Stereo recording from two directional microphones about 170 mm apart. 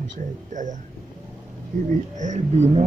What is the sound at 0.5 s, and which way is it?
Speech, 45° right (ahead or behind).